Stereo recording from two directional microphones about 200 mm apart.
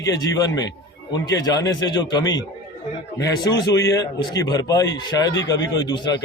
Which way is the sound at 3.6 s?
15° left (ahead or behind).